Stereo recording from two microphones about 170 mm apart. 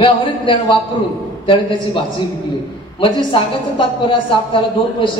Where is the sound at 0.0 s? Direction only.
30° left (ahead or behind).